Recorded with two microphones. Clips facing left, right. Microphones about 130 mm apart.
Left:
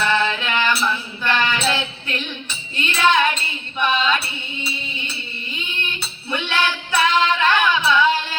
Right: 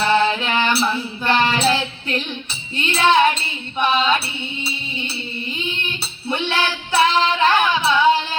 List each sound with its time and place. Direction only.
0.0 s music: 30° right (ahead or behind)
5.5 s female singing: 30° right (ahead or behind)